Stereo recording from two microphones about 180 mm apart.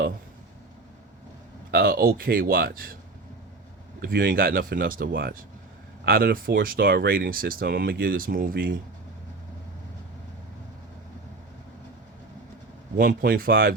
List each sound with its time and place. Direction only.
1.7 s speech: 55° right (ahead or behind)
4.0 s speech: 55° right (ahead or behind)
13.0 s speech: 55° right (ahead or behind)